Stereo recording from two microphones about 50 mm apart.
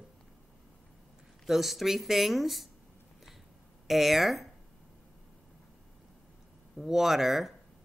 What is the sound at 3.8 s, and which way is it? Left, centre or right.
Speech, centre.